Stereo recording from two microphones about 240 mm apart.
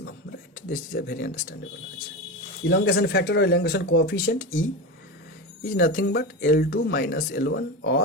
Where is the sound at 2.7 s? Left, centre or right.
Left.